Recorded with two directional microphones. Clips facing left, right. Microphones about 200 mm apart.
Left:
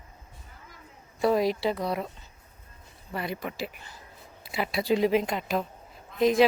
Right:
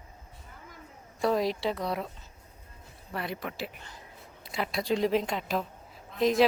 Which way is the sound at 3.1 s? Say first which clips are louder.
Left 2 dB; centre (ahead or behind).